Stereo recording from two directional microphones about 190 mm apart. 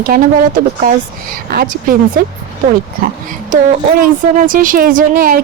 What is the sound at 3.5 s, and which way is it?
Speech, 45° right (ahead or behind).